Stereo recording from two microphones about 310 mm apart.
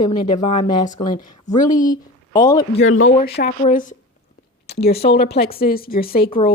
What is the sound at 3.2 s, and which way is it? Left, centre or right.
Speech, left.